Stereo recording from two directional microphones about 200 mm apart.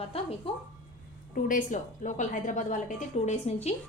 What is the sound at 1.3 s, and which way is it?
A woman's voice, 40° left (ahead or behind).